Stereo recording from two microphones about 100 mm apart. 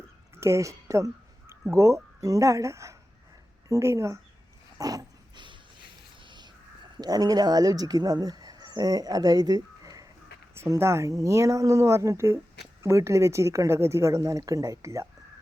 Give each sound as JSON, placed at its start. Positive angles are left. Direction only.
{"t": 0.3, "sound": "a sound", "side_deg": -30}
{"t": 1.7, "sound": "speech", "side_deg": -30}
{"t": 6.2, "sound": "crow", "side_deg": -50}
{"t": 7.0, "sound": "speech", "side_deg": -40}